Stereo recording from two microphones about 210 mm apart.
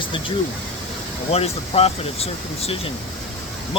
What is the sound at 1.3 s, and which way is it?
Speech, 30° left (ahead or behind).